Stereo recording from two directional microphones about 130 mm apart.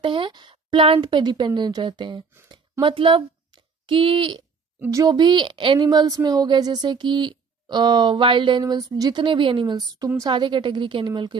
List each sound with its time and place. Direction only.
0.0 s speech: 40° right (ahead or behind)
4.7 s speech: 30° right (ahead or behind)